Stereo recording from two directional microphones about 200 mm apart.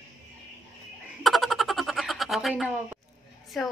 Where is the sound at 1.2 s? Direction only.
Centre (ahead or behind).